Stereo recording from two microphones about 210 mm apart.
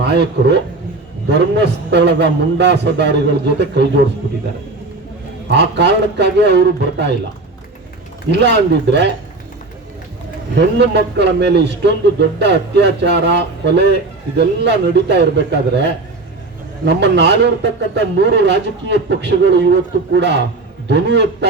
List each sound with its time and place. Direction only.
0.0 s a man's voice: 55° right (ahead or behind)
5.5 s a man's voice: 55° right (ahead or behind)
8.3 s a man's voice: 55° right (ahead or behind)
10.5 s a man's voice: 55° right (ahead or behind)